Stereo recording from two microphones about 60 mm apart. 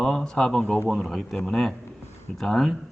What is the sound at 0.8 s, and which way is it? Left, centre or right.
A man's voice, centre.